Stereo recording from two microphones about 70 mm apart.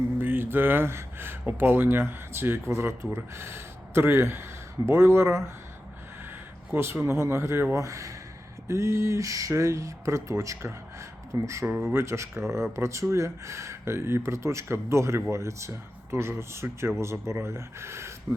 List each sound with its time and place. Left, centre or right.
0.2 s speech: right
6.7 s speech: right
11.6 s speech: right
11.9 s speech: right